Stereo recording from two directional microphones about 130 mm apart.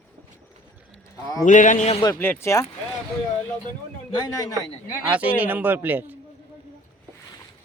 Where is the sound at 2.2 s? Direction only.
20° left (ahead or behind).